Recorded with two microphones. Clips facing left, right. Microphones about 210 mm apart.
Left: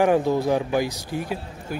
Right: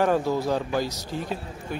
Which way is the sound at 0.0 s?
15° left (ahead or behind).